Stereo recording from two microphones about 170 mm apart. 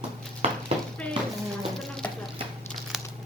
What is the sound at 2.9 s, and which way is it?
Crumpling, centre (ahead or behind).